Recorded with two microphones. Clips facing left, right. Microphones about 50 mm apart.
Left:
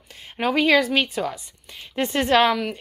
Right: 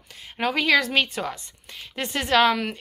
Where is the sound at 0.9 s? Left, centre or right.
Centre.